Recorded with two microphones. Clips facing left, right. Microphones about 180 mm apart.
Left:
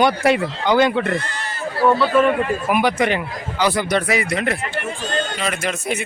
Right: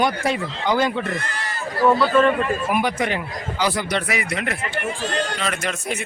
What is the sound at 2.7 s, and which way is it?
Speech, 80° left.